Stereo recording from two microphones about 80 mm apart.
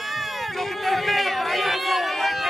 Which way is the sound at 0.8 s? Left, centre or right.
Centre.